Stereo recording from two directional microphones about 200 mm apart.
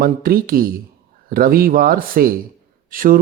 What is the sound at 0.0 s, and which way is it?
Speech, 45° right (ahead or behind).